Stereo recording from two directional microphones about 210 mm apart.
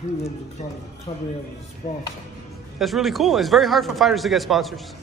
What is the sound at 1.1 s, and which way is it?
Speech, 25° left (ahead or behind).